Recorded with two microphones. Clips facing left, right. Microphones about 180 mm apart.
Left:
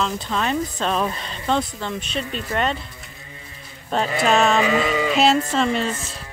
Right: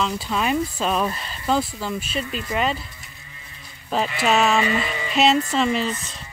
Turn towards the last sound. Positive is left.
turn(degrees=0)  # may be behind; listen again after turning